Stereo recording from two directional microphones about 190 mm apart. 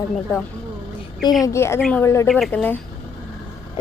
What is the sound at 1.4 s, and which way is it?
Speech, 15° left (ahead or behind).